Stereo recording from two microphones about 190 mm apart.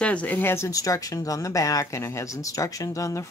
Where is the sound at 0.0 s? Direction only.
5° left (ahead or behind).